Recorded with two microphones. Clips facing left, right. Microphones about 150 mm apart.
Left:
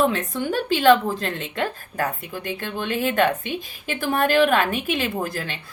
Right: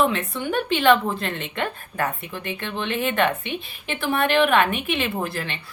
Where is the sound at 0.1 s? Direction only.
45° left (ahead or behind).